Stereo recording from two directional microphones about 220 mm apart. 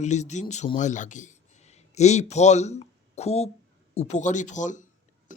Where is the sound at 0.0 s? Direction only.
30° left (ahead or behind).